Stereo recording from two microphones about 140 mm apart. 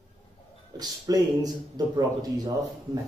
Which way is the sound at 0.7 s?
25° right (ahead or behind).